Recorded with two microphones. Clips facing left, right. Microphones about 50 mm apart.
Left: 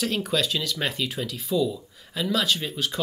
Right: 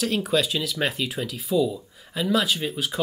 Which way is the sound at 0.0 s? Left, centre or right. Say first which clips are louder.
Right 2 dB; centre.